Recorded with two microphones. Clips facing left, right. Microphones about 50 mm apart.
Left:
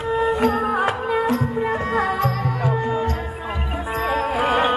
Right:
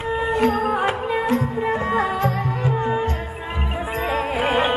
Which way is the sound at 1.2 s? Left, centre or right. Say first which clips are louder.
Even; right.